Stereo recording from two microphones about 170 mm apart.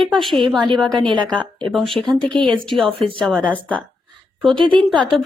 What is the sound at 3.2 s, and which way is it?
Speech, 10° right (ahead or behind).